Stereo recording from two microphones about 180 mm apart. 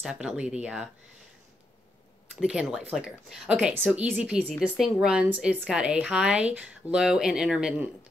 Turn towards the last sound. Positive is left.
turn(degrees=-5)  # may be behind; listen again after turning